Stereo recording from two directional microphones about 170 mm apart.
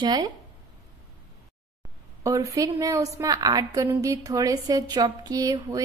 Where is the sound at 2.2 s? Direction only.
20° right (ahead or behind).